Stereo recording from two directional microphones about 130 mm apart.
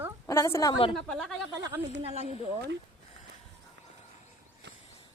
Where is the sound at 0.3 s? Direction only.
25° left (ahead or behind).